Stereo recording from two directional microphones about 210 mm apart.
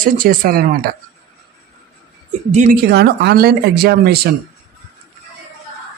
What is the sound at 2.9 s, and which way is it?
A man's voice, 50° right (ahead or behind).